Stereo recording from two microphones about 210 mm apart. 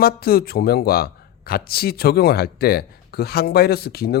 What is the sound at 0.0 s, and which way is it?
Speech, 45° left (ahead or behind).